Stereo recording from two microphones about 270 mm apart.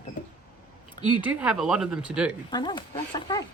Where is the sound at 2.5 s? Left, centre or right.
Centre.